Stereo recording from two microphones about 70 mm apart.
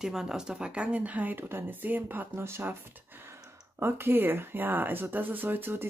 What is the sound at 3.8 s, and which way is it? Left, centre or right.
Speech, right.